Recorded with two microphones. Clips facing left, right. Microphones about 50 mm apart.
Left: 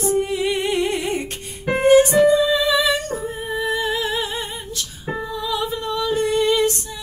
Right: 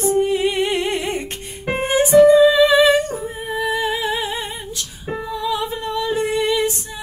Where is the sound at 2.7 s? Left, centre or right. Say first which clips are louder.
Right 6 dB; right.